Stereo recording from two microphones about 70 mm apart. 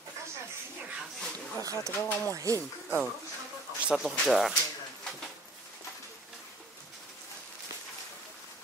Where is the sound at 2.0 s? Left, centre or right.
Left.